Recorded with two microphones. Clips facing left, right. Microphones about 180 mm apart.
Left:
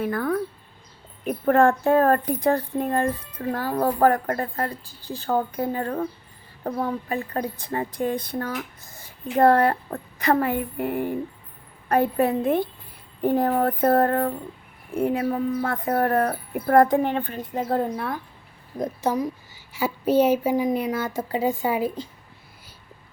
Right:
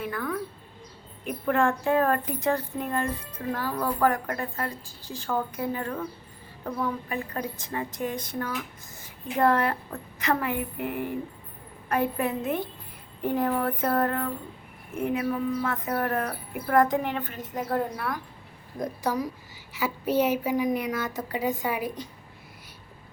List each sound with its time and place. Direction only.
0.0 s a woman's voice: 40° left (ahead or behind)